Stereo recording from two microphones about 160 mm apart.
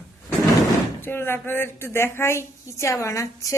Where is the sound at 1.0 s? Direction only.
15° left (ahead or behind).